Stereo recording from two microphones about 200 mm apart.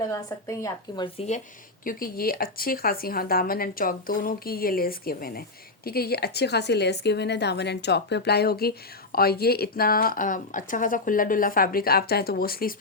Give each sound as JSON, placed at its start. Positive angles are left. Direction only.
{"t": 0.1, "sound": "a woman's voice", "side_deg": 15}
{"t": 1.8, "sound": "speech", "side_deg": 45}